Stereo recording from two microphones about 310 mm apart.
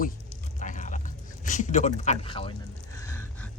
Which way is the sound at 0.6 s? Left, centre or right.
Left.